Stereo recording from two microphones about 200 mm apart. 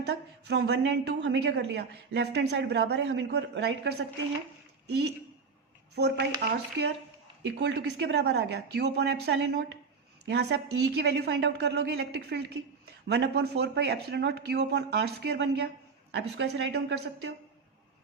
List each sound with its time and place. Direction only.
0.0 s a woman's voice: 55° right (ahead or behind)
7.4 s a woman's voice: 55° right (ahead or behind)